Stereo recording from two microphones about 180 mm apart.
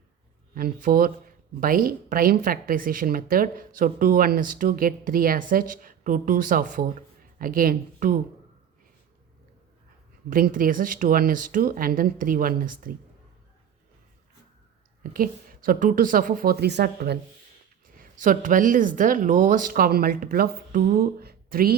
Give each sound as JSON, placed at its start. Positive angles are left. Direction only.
{"t": 0.5, "sound": "a woman's voice", "side_deg": -50}
{"t": 10.2, "sound": "a woman's voice", "side_deg": -50}
{"t": 15.0, "sound": "a woman's voice", "side_deg": -50}
{"t": 17.9, "sound": "a woman's voice", "side_deg": -50}